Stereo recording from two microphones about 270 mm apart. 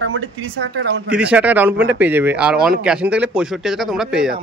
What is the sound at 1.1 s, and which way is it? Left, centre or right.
Speech, centre.